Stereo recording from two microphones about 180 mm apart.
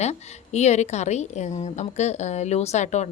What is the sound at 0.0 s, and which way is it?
A woman's voice, 40° left (ahead or behind).